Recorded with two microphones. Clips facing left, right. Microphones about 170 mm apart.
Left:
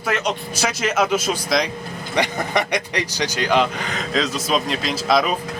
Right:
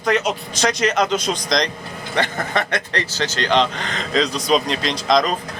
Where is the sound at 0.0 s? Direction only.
5° left (ahead or behind).